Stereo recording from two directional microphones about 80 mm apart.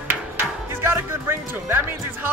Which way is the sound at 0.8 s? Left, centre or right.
Right.